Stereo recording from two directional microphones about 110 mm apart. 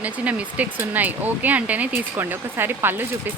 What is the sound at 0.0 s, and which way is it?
Speech, 15° right (ahead or behind).